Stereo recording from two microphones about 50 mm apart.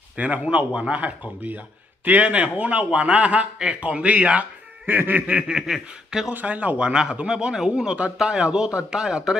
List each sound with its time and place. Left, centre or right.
0.2 s speech: right
4.8 s snicker: right
5.5 s a man's voice: centre
6.4 s a man's voice: right; by 9.4 s centre